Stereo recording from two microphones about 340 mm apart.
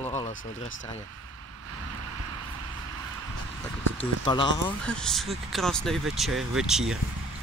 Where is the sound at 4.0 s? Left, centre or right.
Centre.